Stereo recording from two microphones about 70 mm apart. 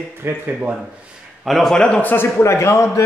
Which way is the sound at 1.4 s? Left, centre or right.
Centre.